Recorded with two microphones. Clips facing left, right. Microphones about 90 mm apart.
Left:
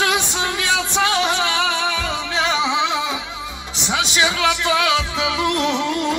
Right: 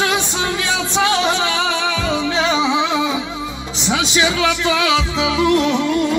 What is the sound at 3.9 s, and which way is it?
Speech, 55° left (ahead or behind).